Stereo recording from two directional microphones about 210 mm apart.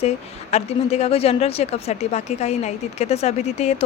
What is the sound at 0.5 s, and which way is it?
Speech, 30° left (ahead or behind).